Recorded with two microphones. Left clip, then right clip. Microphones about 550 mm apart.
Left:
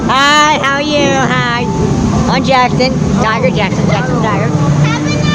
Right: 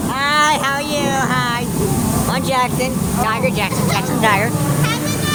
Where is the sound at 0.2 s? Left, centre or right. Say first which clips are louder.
Left 6 dB; right.